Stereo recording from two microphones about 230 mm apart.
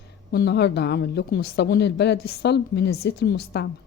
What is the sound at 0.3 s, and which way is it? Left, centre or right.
Speech, left.